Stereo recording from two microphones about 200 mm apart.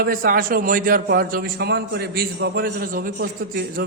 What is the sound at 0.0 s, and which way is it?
A man's voice, 45° right (ahead or behind).